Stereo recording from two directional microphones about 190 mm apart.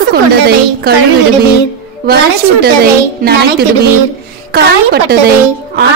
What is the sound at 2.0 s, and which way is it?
A woman's voice, 55° right (ahead or behind).